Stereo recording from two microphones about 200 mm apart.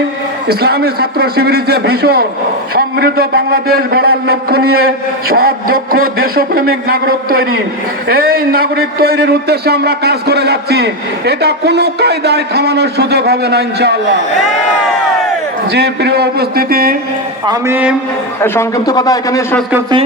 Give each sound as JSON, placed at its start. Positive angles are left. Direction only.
{"t": 0.4, "sound": "a man's voice", "side_deg": -50}
{"t": 15.7, "sound": "a man's voice", "side_deg": -55}
{"t": 17.4, "sound": "speech", "side_deg": -20}
{"t": 18.4, "sound": "speech", "side_deg": 15}